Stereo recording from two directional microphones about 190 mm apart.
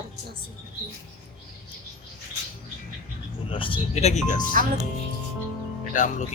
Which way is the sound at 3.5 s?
25° left (ahead or behind).